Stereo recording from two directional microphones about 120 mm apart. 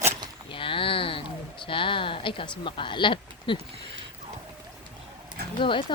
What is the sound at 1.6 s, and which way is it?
Speech, 45° left (ahead or behind).